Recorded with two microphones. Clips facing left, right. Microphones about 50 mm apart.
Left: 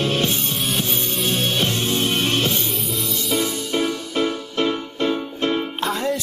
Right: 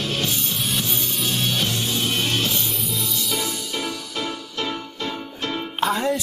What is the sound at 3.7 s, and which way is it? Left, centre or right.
Music, left.